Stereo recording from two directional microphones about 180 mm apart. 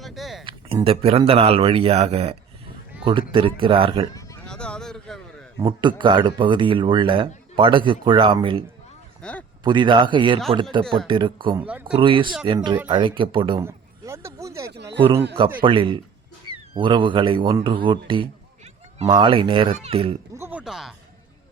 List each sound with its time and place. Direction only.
0.0 s a sound: centre (ahead or behind)
0.9 s speech: 30° right (ahead or behind)
4.1 s a sound: 20° left (ahead or behind)
4.4 s a sound: 5° left (ahead or behind)
5.5 s speech: 25° right (ahead or behind)
9.2 s speech: 5° left (ahead or behind)
9.6 s speech: 25° right (ahead or behind)
11.6 s speech: 5° right (ahead or behind)
11.9 s speech: 30° right (ahead or behind)
13.6 s a sound: 15° right (ahead or behind)
14.9 s speech: 30° right (ahead or behind)
20.3 s speech: 10° right (ahead or behind)